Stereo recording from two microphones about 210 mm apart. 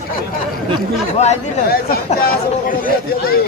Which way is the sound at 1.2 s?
30° left (ahead or behind).